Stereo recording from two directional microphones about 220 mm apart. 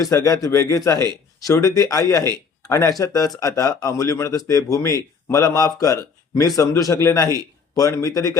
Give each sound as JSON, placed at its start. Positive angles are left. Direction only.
{"t": 0.0, "sound": "speech", "side_deg": 15}